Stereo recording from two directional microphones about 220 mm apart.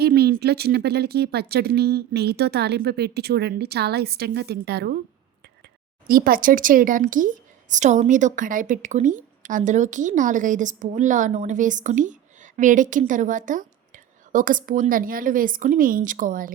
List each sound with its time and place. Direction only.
0.0 s speech: 45° right (ahead or behind)
6.1 s speech: 40° right (ahead or behind)